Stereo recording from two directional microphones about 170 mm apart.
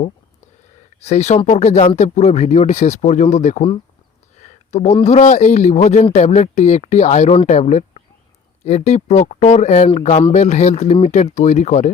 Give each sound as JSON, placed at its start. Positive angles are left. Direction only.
{"t": 1.0, "sound": "speech", "side_deg": 40}
{"t": 4.4, "sound": "a sound", "side_deg": 40}
{"t": 5.0, "sound": "speech", "side_deg": 45}